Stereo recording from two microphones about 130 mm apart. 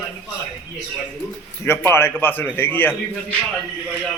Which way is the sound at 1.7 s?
20° left (ahead or behind).